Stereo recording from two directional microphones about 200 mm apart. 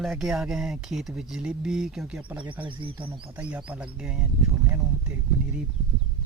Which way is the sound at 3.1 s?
5° right (ahead or behind).